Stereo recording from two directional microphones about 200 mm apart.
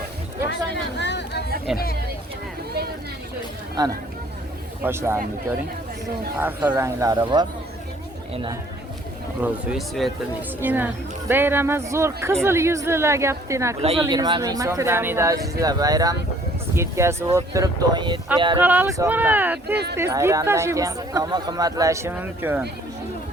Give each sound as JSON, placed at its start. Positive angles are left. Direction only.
{"t": 0.9, "sound": "chatter", "side_deg": 60}
{"t": 3.8, "sound": "speech", "side_deg": -20}
{"t": 6.4, "sound": "speech", "side_deg": -10}
{"t": 9.4, "sound": "speech", "side_deg": -5}
{"t": 13.8, "sound": "speech", "side_deg": -25}
{"t": 18.5, "sound": "speech", "side_deg": -10}